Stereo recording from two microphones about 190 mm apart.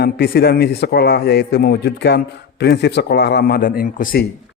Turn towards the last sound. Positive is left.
turn(degrees=50)  # may be behind; listen again after turning